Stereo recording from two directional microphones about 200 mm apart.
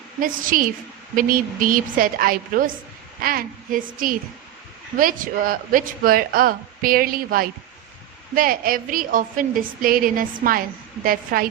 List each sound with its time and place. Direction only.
0.2 s speech: 45° right (ahead or behind)